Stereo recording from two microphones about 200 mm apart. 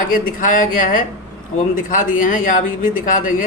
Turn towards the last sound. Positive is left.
turn(degrees=40)  # may be behind; listen again after turning